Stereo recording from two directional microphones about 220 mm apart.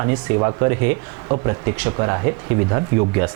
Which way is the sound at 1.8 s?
20° right (ahead or behind).